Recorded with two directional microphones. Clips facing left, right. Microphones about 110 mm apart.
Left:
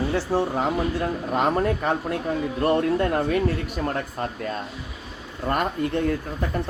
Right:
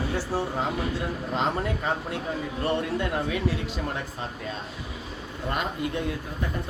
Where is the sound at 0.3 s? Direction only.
20° left (ahead or behind).